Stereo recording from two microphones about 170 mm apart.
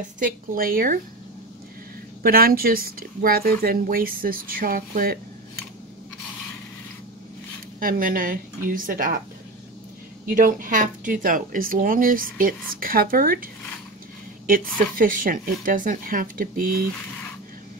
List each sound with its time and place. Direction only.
0.2 s speech: 55° right (ahead or behind)
2.2 s speech: 60° right (ahead or behind)
7.8 s speech: 55° right (ahead or behind)
10.3 s speech: 55° right (ahead or behind)